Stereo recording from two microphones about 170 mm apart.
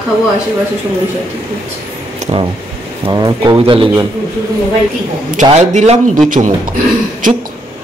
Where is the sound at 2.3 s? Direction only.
35° right (ahead or behind).